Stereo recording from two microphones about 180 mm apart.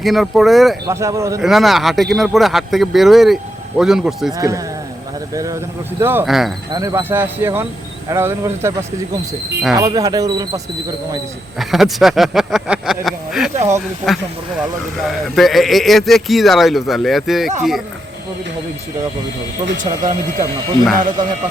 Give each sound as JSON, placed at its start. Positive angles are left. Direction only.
{"t": 0.0, "sound": "speech", "side_deg": 0}
{"t": 0.9, "sound": "speech", "side_deg": -15}
{"t": 1.4, "sound": "speech", "side_deg": 0}
{"t": 4.4, "sound": "speech", "side_deg": -15}
{"t": 6.2, "sound": "speech", "side_deg": 0}
{"t": 6.7, "sound": "speech", "side_deg": -15}
{"t": 9.7, "sound": "speech", "side_deg": -20}
{"t": 11.7, "sound": "speech", "side_deg": 0}
{"t": 15.0, "sound": "speech", "side_deg": 0}
{"t": 19.8, "sound": "speech", "side_deg": -45}